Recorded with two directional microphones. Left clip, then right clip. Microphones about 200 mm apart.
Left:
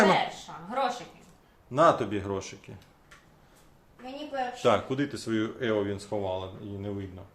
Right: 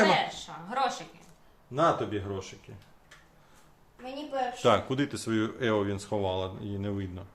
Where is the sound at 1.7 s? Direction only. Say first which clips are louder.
Left 4 dB; 45° left (ahead or behind).